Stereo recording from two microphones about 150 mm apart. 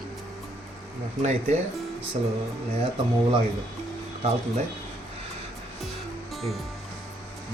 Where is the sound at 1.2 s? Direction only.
50° right (ahead or behind).